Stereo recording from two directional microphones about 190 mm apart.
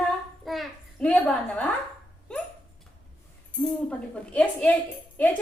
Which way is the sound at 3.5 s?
5° left (ahead or behind).